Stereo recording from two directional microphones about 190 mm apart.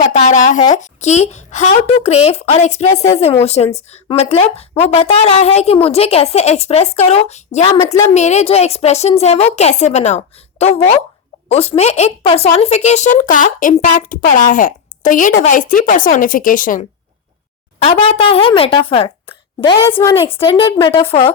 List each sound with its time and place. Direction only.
0.0 s a woman's voice: 40° left (ahead or behind)
2.9 s speech: 15° left (ahead or behind)
3.4 s a woman's voice: 35° left (ahead or behind)
17.7 s a woman's voice: 30° left (ahead or behind)